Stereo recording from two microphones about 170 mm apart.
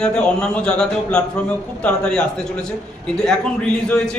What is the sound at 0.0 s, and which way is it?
Speech, 5° left (ahead or behind).